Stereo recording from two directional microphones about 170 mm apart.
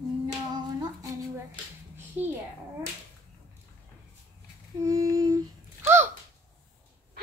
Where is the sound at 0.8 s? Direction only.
20° right (ahead or behind).